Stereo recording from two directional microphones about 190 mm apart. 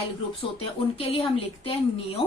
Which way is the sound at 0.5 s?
30° left (ahead or behind).